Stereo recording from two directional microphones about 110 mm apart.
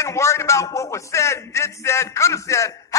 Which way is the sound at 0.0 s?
25° left (ahead or behind).